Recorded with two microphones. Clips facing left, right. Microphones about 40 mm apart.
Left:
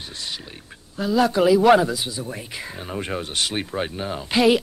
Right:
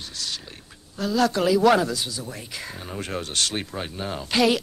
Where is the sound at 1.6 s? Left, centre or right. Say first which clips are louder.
Left 3 dB; centre.